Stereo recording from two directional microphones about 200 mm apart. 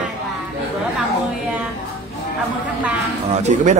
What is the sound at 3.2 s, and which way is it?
Speech, 35° right (ahead or behind).